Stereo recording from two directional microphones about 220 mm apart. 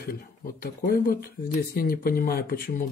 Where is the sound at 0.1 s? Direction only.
45° left (ahead or behind).